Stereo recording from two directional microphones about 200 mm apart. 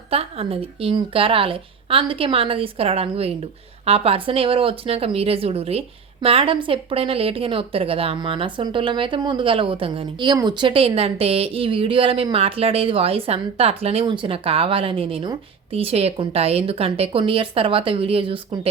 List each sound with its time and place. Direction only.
0.1 s a woman's voice: 30° right (ahead or behind)